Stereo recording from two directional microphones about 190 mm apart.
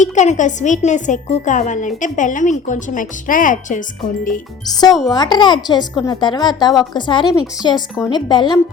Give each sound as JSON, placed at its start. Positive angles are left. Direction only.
{"t": 0.0, "sound": "speech", "side_deg": 40}
{"t": 5.0, "sound": "speech", "side_deg": 20}